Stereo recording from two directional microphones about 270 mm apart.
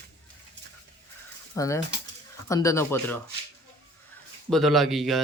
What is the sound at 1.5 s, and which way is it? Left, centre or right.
Speech, centre.